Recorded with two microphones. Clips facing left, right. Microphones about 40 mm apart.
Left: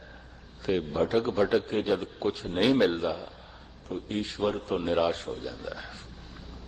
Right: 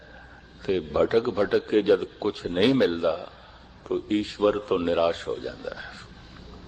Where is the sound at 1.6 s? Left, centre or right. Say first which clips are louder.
Right 7 dB; right.